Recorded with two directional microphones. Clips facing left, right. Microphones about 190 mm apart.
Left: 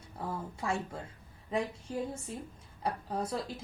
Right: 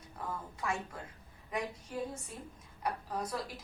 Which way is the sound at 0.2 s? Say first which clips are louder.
Left 3 dB; 30° left (ahead or behind).